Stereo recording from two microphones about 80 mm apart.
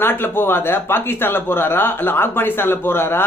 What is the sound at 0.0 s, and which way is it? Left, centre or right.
A man's voice, left.